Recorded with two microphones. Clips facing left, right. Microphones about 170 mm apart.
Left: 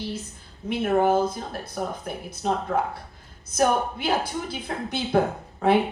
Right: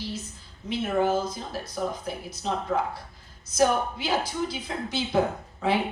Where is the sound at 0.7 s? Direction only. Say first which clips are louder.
Left 4 dB; 55° left (ahead or behind).